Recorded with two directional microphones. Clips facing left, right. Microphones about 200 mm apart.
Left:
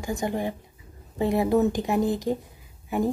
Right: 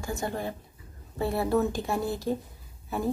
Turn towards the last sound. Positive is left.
turn(degrees=15)  # may be behind; listen again after turning